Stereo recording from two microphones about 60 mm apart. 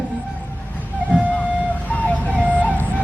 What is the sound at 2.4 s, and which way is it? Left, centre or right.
Music, right.